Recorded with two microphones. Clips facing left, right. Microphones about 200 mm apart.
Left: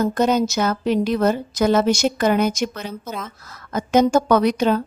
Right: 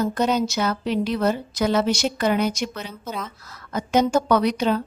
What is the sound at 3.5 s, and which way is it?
A woman's voice, 50° left (ahead or behind).